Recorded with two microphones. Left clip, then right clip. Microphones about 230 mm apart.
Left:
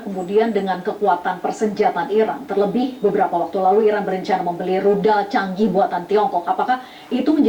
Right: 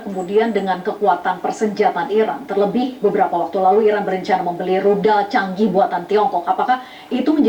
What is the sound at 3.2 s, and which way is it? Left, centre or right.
Speech, right.